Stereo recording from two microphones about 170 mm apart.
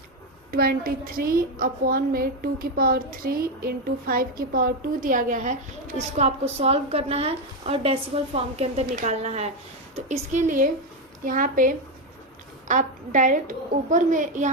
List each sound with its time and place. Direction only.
0.5 s a woman's voice: 60° right (ahead or behind)